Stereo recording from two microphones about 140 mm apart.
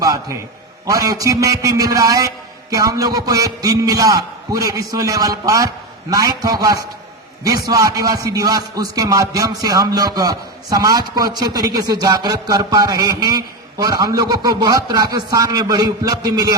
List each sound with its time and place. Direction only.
0.0 s a man's voice: 25° right (ahead or behind)